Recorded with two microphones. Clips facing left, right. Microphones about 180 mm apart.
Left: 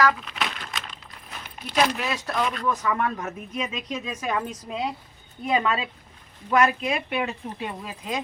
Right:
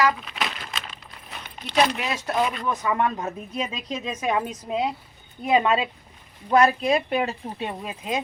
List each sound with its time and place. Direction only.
0.1 s a sound: centre (ahead or behind)
2.0 s speech: 20° right (ahead or behind)
2.4 s speech: 5° right (ahead or behind)
2.6 s speech: 20° right (ahead or behind); by 7.3 s 35° right (ahead or behind)
7.6 s speech: 25° right (ahead or behind)